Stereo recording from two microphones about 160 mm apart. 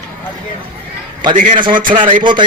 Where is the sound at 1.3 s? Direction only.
55° right (ahead or behind).